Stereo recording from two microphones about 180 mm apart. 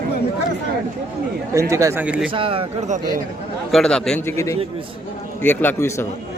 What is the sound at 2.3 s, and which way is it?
Speech, 30° right (ahead or behind).